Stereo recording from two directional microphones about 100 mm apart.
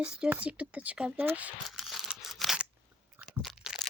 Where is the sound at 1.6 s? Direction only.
Centre (ahead or behind).